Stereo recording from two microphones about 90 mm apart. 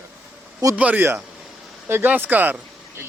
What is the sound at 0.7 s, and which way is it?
Speech, 15° right (ahead or behind).